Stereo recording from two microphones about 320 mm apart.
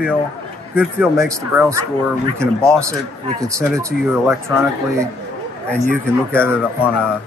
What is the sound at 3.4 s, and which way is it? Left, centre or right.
Speech, centre.